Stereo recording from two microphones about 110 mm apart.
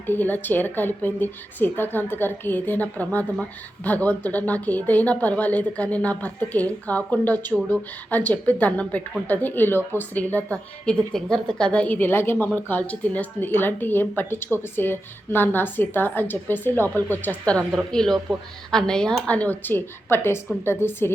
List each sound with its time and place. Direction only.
0.1 s a woman's voice: 15° left (ahead or behind)